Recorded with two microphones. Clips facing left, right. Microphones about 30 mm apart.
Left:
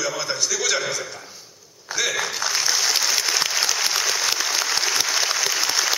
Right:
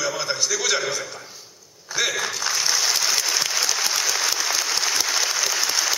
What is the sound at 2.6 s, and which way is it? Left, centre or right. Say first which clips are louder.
Applause: even; centre.